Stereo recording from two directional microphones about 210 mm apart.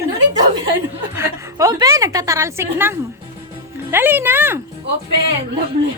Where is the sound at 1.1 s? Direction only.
15° right (ahead or behind).